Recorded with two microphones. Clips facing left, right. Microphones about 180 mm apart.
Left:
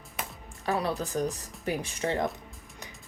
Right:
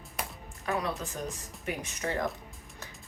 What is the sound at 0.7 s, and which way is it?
Speech, 35° left (ahead or behind).